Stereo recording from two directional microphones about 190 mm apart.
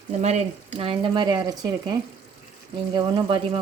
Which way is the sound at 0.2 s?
35° right (ahead or behind).